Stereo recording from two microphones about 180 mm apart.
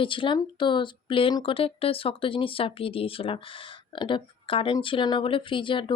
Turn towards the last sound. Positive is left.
turn(degrees=25)  # may be behind; listen again after turning